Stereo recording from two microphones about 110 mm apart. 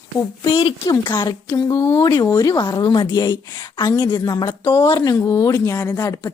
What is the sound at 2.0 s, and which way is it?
A woman's voice, 40° left (ahead or behind).